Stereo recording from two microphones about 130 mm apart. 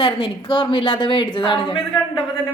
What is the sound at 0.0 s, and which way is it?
Speech, 40° left (ahead or behind).